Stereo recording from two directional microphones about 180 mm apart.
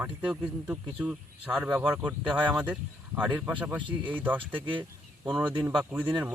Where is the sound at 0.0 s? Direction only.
10° right (ahead or behind).